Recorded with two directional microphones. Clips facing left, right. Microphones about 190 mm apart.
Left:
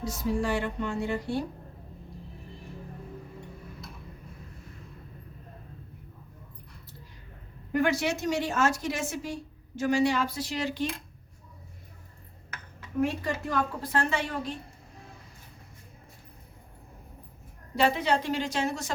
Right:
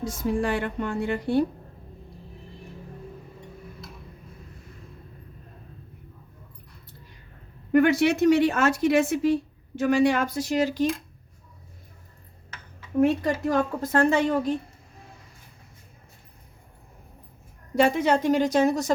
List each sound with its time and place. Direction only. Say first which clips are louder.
0.0 s a woman's voice: right 3 dB; 50° right (ahead or behind)
7.7 s a woman's voice: right 7 dB; 60° right (ahead or behind)
13.0 s a woman's voice: right 7 dB; 45° right (ahead or behind)
17.7 s a woman's voice: right 5 dB; 50° right (ahead or behind)